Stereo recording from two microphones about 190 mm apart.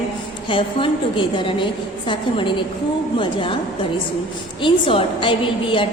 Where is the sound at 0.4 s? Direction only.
25° left (ahead or behind).